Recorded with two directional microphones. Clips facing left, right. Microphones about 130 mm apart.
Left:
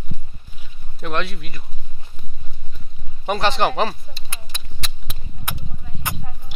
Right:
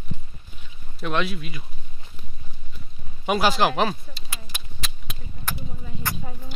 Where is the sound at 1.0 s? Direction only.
Centre (ahead or behind).